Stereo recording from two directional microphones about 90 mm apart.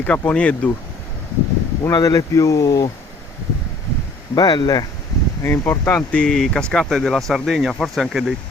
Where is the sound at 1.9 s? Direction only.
40° left (ahead or behind).